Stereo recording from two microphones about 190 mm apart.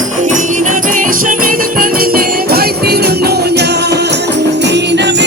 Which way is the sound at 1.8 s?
50° right (ahead or behind).